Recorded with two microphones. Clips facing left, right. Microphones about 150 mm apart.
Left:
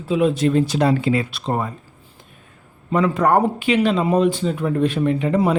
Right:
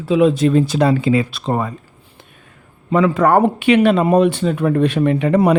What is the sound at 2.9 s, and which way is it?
Speech, 90° right.